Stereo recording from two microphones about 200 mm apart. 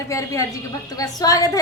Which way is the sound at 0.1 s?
15° left (ahead or behind).